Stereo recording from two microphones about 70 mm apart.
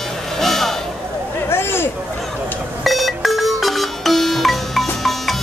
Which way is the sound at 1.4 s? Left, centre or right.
Left.